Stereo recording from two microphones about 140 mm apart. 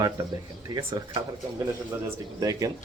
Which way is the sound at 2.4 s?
25° right (ahead or behind).